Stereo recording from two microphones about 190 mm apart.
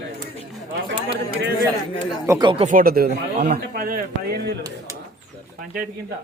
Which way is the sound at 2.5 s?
30° right (ahead or behind).